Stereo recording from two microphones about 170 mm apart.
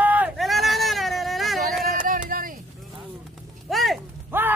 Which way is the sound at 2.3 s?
55° right (ahead or behind).